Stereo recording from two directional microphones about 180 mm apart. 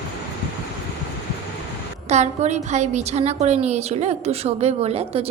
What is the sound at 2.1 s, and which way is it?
A woman's voice, 40° right (ahead or behind).